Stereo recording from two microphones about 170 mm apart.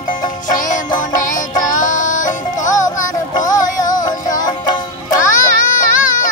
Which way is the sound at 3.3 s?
20° left (ahead or behind).